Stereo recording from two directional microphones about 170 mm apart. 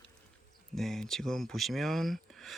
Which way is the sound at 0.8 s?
Centre (ahead or behind).